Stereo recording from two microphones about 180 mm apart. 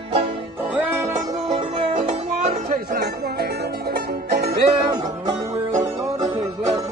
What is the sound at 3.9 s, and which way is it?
Music, 60° right (ahead or behind).